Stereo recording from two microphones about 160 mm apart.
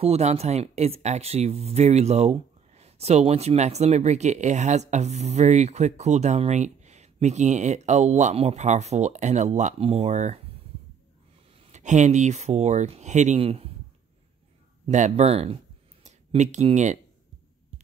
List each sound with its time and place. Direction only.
0.0 s speech: 40° right (ahead or behind)
11.6 s speech: 45° right (ahead or behind)
14.9 s speech: 45° right (ahead or behind)